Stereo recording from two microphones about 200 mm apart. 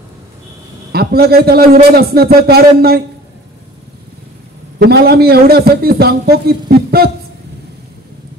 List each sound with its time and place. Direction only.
0.9 s a man's voice: 50° right (ahead or behind)
4.7 s a man's voice: 55° right (ahead or behind)